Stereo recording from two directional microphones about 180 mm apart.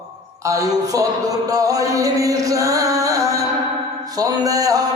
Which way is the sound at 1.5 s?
20° right (ahead or behind).